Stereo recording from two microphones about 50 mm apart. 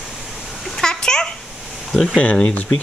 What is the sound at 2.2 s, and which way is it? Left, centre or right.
Speech, left.